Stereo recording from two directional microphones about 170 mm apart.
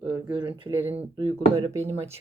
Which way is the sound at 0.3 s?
30° right (ahead or behind).